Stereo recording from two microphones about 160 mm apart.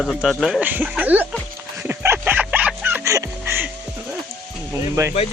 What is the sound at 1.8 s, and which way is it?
Music, 15° right (ahead or behind).